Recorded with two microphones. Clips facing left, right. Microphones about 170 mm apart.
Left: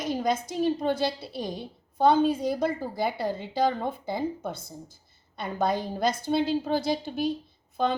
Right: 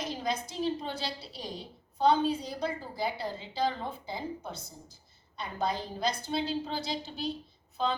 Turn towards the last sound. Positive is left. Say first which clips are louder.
# left 5 dB
turn(degrees=55)  # may be behind; listen again after turning